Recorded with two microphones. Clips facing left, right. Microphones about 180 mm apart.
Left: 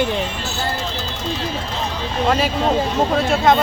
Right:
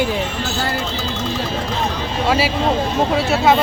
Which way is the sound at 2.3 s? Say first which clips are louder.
Right 1 dB; 5° right (ahead or behind).